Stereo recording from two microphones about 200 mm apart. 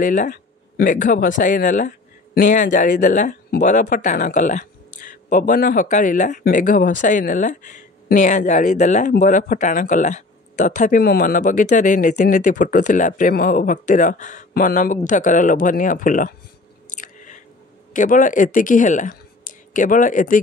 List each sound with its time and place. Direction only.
0.0 s speech: 40° left (ahead or behind)
16.9 s biting: 40° left (ahead or behind)
17.9 s speech: 40° left (ahead or behind)